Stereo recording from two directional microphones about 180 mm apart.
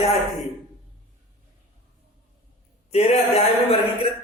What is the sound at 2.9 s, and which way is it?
Speech, 35° left (ahead or behind).